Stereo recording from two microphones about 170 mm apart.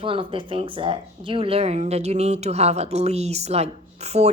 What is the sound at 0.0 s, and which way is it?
Speech, 30° right (ahead or behind).